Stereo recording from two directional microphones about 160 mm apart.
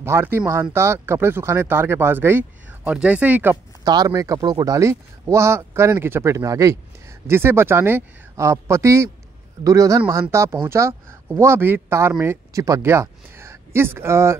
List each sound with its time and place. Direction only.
0.0 s speech: 15° right (ahead or behind)
3.8 s a man's voice: 25° right (ahead or behind)